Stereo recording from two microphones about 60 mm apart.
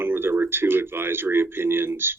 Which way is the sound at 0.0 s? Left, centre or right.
Right.